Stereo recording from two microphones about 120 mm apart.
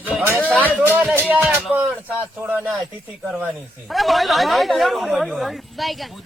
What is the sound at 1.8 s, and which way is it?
A man's voice, 15° right (ahead or behind).